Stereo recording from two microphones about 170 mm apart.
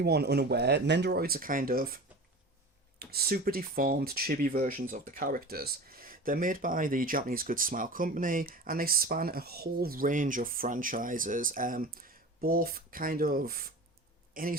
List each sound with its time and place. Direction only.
0.0 s speech: 75° right (ahead or behind); by 2.0 s 60° right (ahead or behind)
3.0 s speech: 65° right (ahead or behind)